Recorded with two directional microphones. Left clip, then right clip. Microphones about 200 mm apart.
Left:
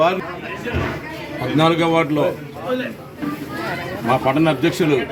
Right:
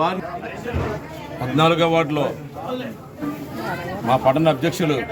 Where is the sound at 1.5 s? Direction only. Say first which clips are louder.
Left 1 dB; 25° right (ahead or behind).